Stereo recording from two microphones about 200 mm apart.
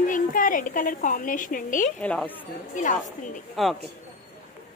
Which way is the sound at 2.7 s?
40° left (ahead or behind).